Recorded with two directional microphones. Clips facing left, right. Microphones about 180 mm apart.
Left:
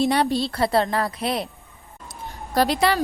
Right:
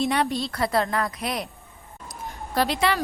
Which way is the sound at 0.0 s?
35° left (ahead or behind).